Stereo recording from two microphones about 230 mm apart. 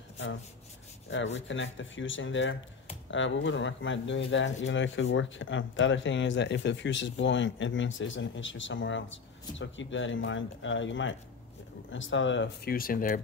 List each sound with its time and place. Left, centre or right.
1.1 s speech: left